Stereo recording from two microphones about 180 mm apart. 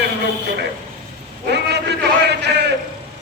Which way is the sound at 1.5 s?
70° right (ahead or behind).